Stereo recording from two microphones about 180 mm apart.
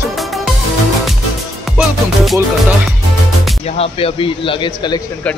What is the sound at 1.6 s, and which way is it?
Music, centre (ahead or behind).